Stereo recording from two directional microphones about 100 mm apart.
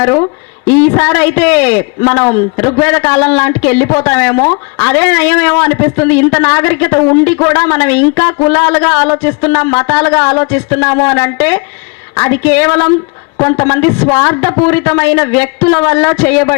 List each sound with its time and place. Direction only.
0.0 s a woman's voice: 30° left (ahead or behind)
14.3 s speech: 35° left (ahead or behind)
14.6 s a woman's voice: 20° left (ahead or behind)